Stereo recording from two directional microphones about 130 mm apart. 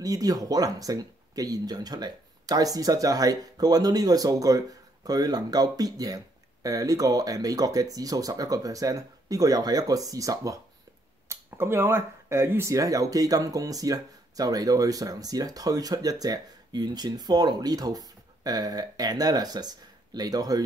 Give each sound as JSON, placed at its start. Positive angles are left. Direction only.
{"t": 0.0, "sound": "speech", "side_deg": -25}